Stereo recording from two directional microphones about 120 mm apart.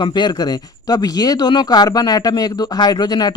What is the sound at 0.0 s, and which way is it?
Speech, 40° left (ahead or behind).